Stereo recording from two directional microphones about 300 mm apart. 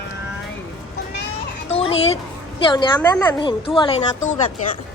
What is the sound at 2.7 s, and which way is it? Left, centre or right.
A woman's voice, centre.